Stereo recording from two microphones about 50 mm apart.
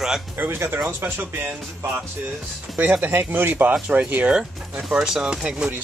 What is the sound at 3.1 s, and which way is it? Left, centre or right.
Speech, right.